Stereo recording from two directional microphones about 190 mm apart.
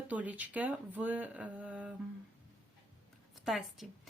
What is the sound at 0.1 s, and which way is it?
Speech, 10° right (ahead or behind).